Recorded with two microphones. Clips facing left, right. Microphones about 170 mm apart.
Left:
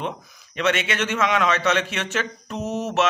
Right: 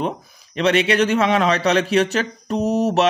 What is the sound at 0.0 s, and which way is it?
Speech, 35° right (ahead or behind).